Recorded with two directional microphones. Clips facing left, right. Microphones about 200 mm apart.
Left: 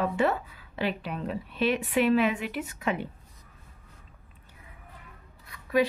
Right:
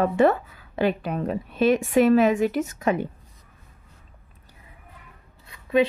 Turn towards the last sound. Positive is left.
turn(degrees=-25)  # may be behind; listen again after turning